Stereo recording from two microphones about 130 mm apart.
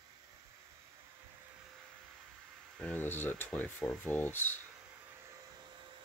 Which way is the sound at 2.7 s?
10° left (ahead or behind).